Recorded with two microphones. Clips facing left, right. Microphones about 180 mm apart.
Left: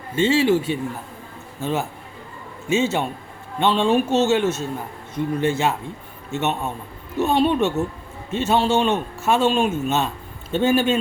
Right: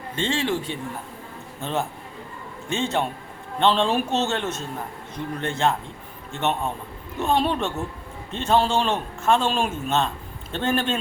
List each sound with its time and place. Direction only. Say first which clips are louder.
0.2 s a man's voice: left 8 dB; 5° left (ahead or behind)